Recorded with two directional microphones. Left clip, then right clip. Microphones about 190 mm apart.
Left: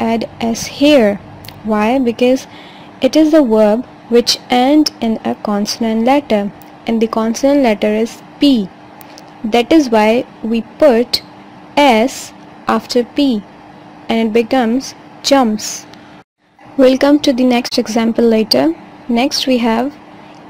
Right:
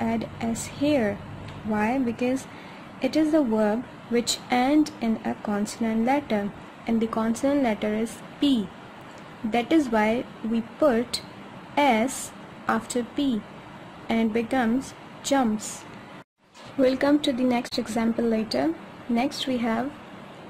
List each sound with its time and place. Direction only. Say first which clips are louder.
0.0 s a woman's voice: left 12 dB; 35° left (ahead or behind)
16.8 s a woman's voice: left 12 dB; 30° left (ahead or behind)